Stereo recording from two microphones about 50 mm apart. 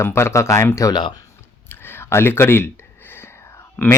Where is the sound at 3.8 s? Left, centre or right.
Left.